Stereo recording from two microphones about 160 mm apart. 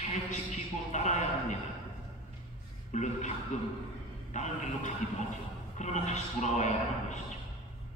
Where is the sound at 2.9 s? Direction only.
45° left (ahead or behind).